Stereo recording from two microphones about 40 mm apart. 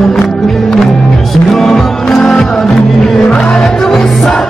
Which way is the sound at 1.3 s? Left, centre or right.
Centre.